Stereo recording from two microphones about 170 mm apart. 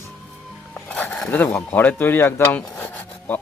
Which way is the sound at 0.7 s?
10° left (ahead or behind).